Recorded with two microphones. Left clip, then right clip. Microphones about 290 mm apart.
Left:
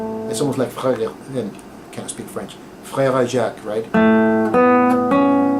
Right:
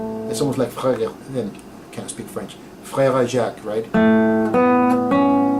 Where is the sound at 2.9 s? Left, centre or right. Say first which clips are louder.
Even; centre.